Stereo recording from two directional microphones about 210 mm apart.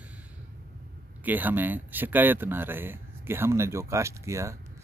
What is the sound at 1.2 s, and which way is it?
Speech, 10° right (ahead or behind).